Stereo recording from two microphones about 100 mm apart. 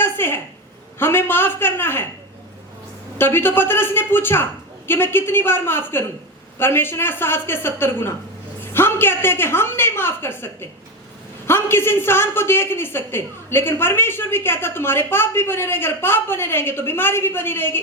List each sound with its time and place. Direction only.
0.0 s a sound: 20° left (ahead or behind)
0.9 s a man's voice: 20° left (ahead or behind)
3.2 s a man's voice: 20° left (ahead or behind)